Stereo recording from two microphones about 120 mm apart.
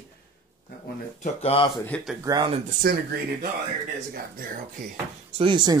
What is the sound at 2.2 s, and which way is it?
Speech, 40° right (ahead or behind).